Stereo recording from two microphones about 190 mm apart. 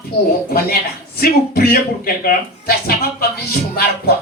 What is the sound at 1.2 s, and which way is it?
Speech, 50° left (ahead or behind).